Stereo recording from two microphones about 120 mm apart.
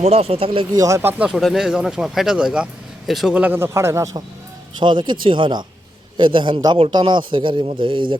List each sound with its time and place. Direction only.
0.0 s speech: 60° right (ahead or behind)
0.7 s a man's voice: 30° right (ahead or behind)
1.4 s a man's voice: centre (ahead or behind); by 4.2 s 25° right (ahead or behind)
4.8 s a man's voice: 40° right (ahead or behind)